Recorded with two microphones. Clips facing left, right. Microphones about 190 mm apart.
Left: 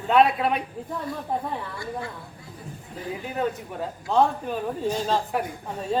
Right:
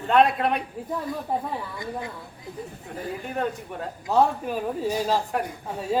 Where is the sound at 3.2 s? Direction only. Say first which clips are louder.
Left 1 dB; 5° left (ahead or behind).